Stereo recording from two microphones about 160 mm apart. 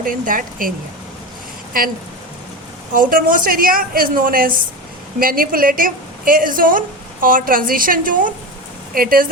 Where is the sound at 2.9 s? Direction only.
60° right (ahead or behind).